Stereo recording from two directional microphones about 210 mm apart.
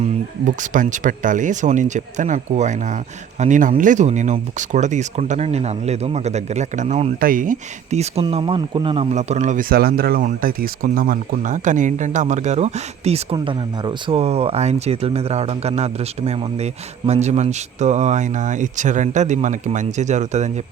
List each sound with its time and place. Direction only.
0.0 s speech: 35° right (ahead or behind)